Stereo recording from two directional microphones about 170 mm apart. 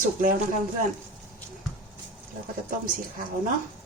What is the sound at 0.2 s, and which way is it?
Speech, 55° right (ahead or behind).